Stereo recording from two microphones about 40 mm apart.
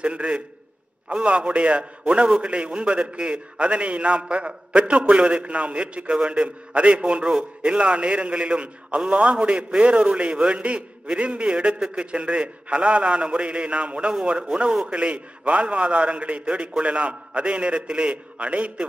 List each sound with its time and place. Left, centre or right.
0.0 s a man's voice: right
5.1 s a man's voice: right
14.2 s a man's voice: right